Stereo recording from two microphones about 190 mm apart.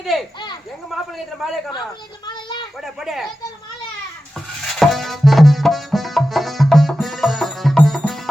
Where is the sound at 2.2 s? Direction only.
25° left (ahead or behind).